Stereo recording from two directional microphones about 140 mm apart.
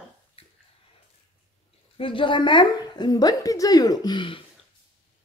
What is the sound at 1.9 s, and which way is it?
A woman's voice, 40° left (ahead or behind).